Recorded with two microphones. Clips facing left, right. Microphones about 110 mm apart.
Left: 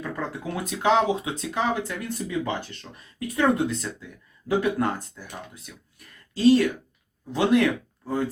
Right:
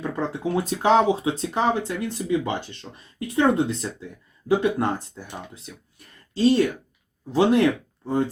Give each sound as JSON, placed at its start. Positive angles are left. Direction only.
{"t": 0.0, "sound": "speech", "side_deg": -25}